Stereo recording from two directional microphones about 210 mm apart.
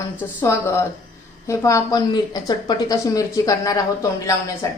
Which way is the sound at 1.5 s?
15° left (ahead or behind).